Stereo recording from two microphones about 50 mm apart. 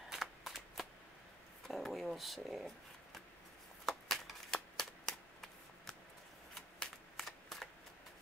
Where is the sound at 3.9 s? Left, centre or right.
Centre.